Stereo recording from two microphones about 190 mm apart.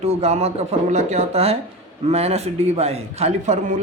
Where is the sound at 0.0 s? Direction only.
35° right (ahead or behind).